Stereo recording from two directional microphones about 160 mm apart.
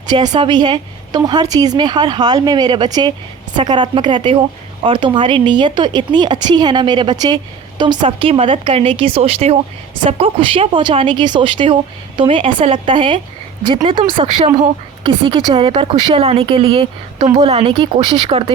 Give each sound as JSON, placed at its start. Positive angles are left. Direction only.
{"t": 0.3, "sound": "a woman's voice", "side_deg": -30}